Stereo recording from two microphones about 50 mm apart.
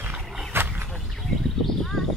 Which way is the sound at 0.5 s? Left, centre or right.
Right.